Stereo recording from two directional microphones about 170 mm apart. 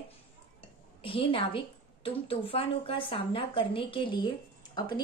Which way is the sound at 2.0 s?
35° left (ahead or behind).